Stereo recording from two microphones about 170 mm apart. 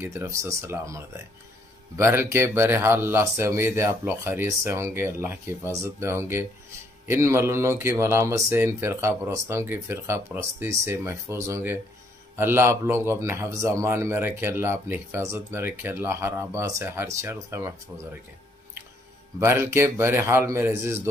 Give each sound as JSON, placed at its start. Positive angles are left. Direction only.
{"t": 0.0, "sound": "speech", "side_deg": -15}
{"t": 19.4, "sound": "speech", "side_deg": -15}